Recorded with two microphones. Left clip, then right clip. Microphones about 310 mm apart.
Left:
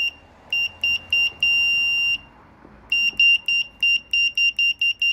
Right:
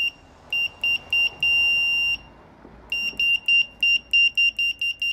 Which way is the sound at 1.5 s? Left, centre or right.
Left.